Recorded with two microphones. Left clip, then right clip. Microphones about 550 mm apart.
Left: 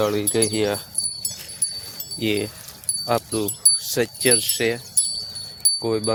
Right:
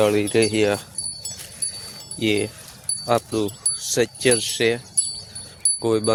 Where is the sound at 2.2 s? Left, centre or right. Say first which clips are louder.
Right 2 dB; left.